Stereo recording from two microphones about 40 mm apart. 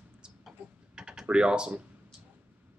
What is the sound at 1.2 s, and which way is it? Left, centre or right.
Speech, right.